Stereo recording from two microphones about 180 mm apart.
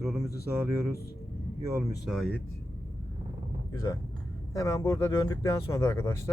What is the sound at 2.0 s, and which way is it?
Speech, centre (ahead or behind).